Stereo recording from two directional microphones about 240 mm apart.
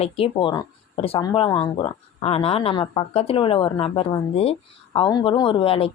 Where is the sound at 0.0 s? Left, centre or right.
Left.